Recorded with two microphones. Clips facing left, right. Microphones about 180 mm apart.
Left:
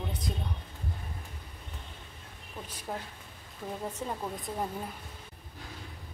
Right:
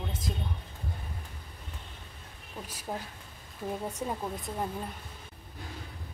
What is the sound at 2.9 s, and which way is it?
A woman's voice, 15° right (ahead or behind).